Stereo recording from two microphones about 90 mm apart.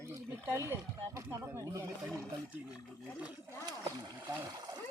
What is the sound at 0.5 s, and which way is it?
Speech, 30° right (ahead or behind).